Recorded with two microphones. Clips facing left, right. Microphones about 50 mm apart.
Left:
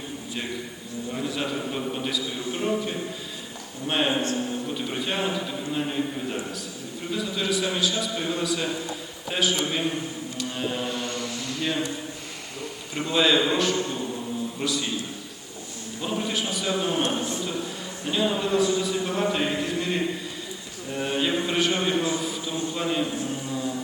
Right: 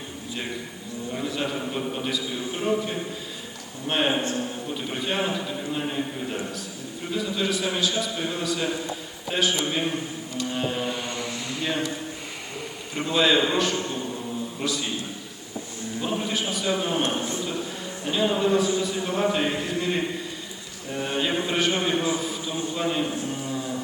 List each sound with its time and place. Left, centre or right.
1.1 s a man's voice: centre
9.9 s a sound: centre
11.3 s mantra: centre
12.9 s a man's voice: centre
16.0 s a man's voice: centre
17.2 s speech: right
18.0 s a man's voice: centre
20.9 s a sound: centre
22.7 s a man's voice: centre